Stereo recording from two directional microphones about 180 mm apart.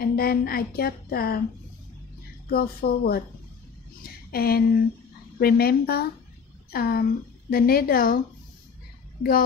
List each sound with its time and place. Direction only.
0.0 s a woman's voice: 55° left (ahead or behind)
2.5 s a woman's voice: 55° left (ahead or behind)
4.3 s a woman's voice: 55° left (ahead or behind)